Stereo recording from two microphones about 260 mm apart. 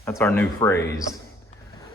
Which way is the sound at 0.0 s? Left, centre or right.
Centre.